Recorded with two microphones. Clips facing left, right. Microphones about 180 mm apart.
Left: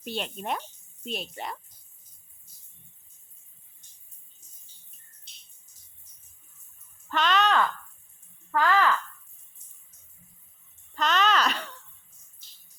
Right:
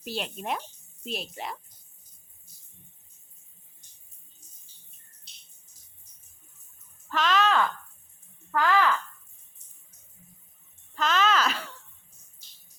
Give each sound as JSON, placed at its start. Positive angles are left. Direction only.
{"t": 0.0, "sound": "speech", "side_deg": 0}
{"t": 7.1, "sound": "speech", "side_deg": 0}
{"t": 10.9, "sound": "speech", "side_deg": 0}